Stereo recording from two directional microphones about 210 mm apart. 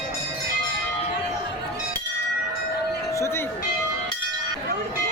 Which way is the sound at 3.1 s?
15° left (ahead or behind).